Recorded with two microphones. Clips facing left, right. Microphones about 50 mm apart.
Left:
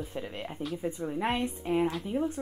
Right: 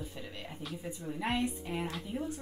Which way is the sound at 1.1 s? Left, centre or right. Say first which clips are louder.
Left 1 dB; left.